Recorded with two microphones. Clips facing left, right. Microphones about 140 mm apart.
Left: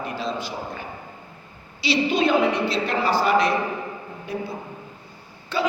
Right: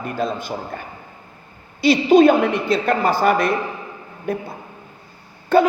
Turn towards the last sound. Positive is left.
turn(degrees=-50)  # may be behind; listen again after turning